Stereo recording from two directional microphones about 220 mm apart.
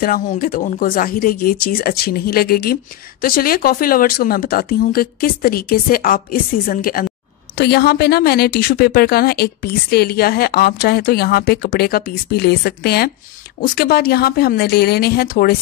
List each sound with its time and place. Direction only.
0.0 s speech: 40° left (ahead or behind)